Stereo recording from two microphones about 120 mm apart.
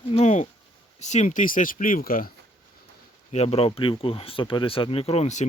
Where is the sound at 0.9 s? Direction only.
75° left (ahead or behind); by 1.6 s 90° left.